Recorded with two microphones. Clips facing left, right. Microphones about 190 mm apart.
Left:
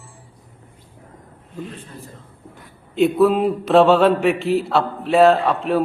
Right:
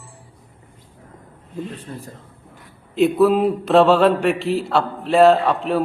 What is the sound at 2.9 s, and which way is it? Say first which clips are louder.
A man's voice: even; centre (ahead or behind).